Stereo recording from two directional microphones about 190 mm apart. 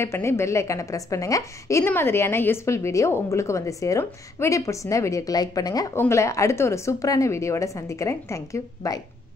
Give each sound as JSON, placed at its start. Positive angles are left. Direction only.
{"t": 0.0, "sound": "a woman's voice", "side_deg": 15}